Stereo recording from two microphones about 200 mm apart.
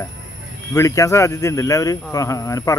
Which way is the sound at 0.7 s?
15° left (ahead or behind).